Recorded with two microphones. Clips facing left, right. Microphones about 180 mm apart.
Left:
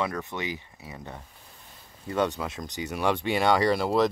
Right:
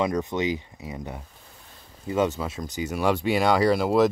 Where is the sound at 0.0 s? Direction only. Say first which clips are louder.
Right 6 dB; 20° right (ahead or behind).